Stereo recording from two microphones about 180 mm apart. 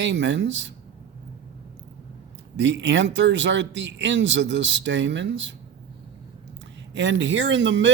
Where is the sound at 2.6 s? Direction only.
85° right.